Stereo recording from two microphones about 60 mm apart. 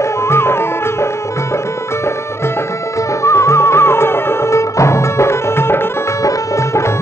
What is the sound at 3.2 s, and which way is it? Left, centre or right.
Music, left.